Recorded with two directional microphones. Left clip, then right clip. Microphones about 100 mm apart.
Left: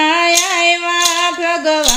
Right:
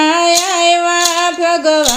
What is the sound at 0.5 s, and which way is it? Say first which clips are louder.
Singing: right 2 dB; 50° right (ahead or behind).